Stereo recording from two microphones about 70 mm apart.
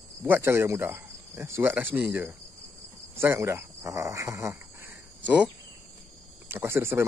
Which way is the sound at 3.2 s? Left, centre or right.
Right.